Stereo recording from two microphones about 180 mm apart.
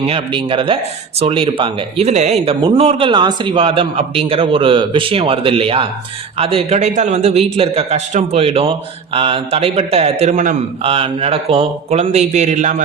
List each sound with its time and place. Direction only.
0.0 s a man's voice: 30° right (ahead or behind)
10.9 s a man's voice: 30° right (ahead or behind)